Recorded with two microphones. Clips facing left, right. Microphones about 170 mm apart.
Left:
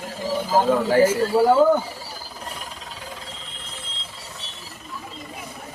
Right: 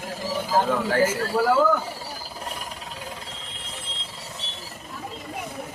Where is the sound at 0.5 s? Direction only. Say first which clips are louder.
Left 4 dB; 10° left (ahead or behind); by 1.8 s 25° left (ahead or behind).